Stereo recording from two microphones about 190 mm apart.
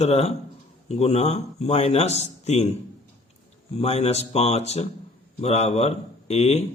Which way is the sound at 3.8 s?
35° left (ahead or behind).